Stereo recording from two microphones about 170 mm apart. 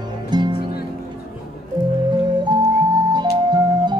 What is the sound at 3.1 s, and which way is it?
Music, 25° right (ahead or behind).